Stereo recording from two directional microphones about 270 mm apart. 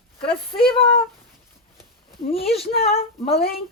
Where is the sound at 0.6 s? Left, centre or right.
Centre.